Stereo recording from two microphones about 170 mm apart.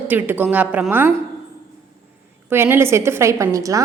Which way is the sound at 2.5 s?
15° right (ahead or behind).